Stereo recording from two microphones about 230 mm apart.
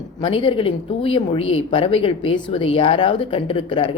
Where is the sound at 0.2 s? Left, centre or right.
Left.